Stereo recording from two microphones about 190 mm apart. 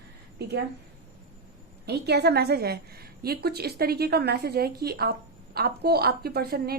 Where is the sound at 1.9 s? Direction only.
60° right (ahead or behind).